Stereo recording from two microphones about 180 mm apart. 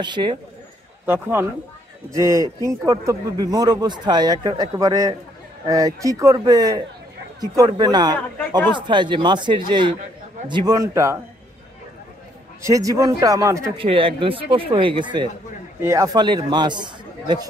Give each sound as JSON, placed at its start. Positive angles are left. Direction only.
{"t": 0.0, "sound": "a man's voice", "side_deg": -25}
{"t": 1.0, "sound": "a man's voice", "side_deg": -10}
{"t": 12.6, "sound": "a man's voice", "side_deg": -15}
{"t": 13.7, "sound": "a man's voice", "side_deg": -30}
{"t": 15.8, "sound": "a man's voice", "side_deg": -15}